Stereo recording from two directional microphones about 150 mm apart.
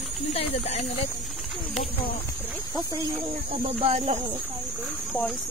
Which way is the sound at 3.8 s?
50° right (ahead or behind).